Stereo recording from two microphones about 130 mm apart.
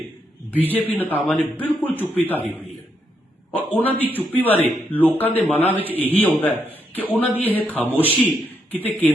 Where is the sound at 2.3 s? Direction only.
15° right (ahead or behind).